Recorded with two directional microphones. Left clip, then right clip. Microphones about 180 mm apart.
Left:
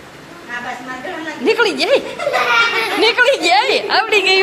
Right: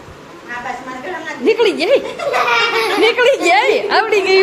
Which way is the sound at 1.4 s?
Centre (ahead or behind).